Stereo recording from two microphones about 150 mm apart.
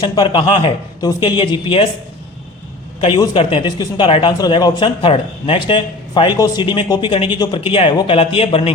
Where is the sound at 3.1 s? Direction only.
35° left (ahead or behind).